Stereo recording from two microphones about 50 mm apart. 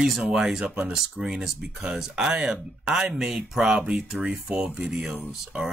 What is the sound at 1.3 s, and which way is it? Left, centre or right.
Speech, centre.